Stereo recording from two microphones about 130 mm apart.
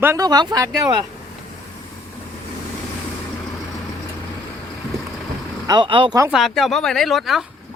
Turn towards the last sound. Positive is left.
turn(degrees=0)  # may be behind; listen again after turning